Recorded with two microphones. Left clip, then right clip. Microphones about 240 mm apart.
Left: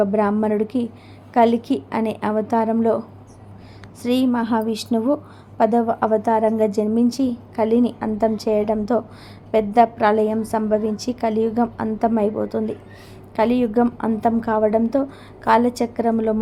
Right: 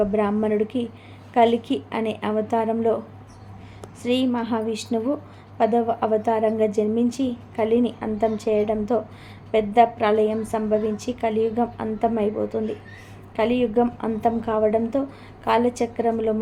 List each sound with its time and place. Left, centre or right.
0.0 s a woman's voice: centre
4.0 s a woman's voice: left